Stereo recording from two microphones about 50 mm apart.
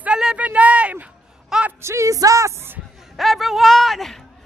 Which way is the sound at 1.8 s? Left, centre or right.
Right.